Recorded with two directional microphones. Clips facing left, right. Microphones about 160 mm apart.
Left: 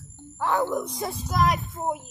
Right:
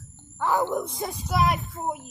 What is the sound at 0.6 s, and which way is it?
Speech, 20° right (ahead or behind).